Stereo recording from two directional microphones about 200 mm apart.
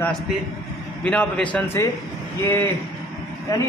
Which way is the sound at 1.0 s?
5° left (ahead or behind).